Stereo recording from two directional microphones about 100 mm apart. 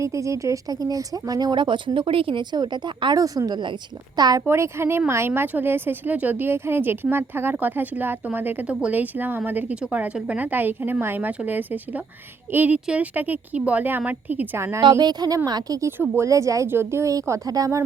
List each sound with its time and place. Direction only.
0.0 s speech: 30° right (ahead or behind)
4.4 s speech: 25° right (ahead or behind)
14.8 s speech: 45° right (ahead or behind)
15.8 s speech: 25° right (ahead or behind)